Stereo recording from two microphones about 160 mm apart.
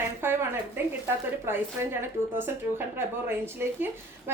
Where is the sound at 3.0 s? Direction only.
15° right (ahead or behind).